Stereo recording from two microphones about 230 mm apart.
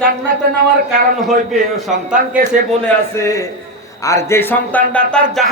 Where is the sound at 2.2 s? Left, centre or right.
Right.